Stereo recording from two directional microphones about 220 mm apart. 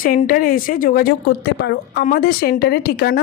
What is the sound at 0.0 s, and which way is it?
Speech, 40° left (ahead or behind).